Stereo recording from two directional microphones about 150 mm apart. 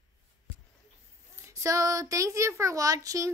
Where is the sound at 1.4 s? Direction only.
20° right (ahead or behind).